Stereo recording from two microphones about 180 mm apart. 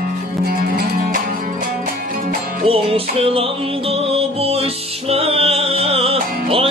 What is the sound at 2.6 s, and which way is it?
Music, 30° right (ahead or behind).